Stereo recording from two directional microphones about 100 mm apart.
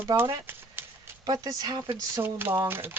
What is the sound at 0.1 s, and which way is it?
Speech, 35° right (ahead or behind).